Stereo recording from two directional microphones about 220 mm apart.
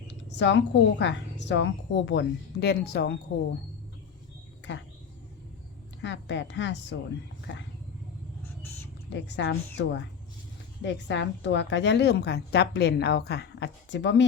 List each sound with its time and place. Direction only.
0.3 s a woman's voice: 55° left (ahead or behind)
6.0 s speech: 55° left (ahead or behind)
9.0 s a woman's voice: 55° left (ahead or behind)